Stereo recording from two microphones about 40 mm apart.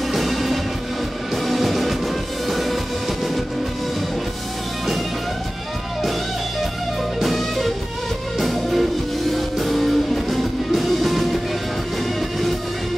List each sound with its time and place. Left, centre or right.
0.1 s music: centre
2.5 s train: centre
7.2 s music: centre